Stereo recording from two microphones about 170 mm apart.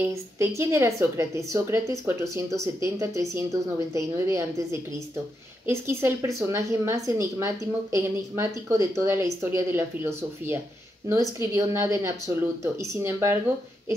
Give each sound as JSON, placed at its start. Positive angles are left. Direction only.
{"t": 0.0, "sound": "a woman's voice", "side_deg": -15}